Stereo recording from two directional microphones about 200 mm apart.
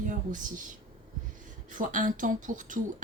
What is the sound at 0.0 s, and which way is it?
Speech, 40° right (ahead or behind).